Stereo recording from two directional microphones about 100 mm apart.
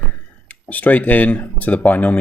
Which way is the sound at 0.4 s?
15° left (ahead or behind).